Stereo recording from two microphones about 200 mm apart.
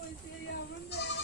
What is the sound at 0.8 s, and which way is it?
Goat, 55° left (ahead or behind).